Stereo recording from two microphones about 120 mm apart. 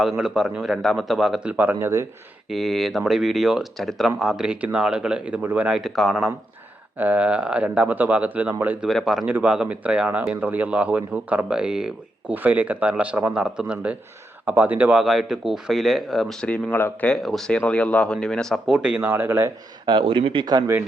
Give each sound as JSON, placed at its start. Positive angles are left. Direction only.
{"t": 0.2, "sound": "speech", "side_deg": -5}
{"t": 1.5, "sound": "speech", "side_deg": -20}
{"t": 2.5, "sound": "speech", "side_deg": 0}
{"t": 7.0, "sound": "speech", "side_deg": -10}
{"t": 8.9, "sound": "speech", "side_deg": 0}
{"t": 16.7, "sound": "speech", "side_deg": 15}
{"t": 17.2, "sound": "speech", "side_deg": 5}
{"t": 18.7, "sound": "speech", "side_deg": -10}
{"t": 19.8, "sound": "speech", "side_deg": -40}